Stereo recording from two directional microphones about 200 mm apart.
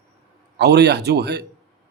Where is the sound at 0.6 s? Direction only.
55° right (ahead or behind).